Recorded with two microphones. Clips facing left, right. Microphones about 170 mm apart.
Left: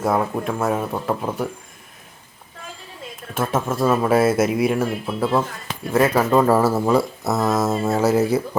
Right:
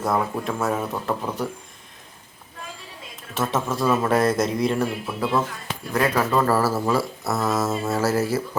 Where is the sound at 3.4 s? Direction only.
5° left (ahead or behind).